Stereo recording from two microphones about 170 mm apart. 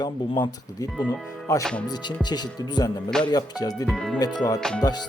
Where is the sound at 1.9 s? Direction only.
25° left (ahead or behind).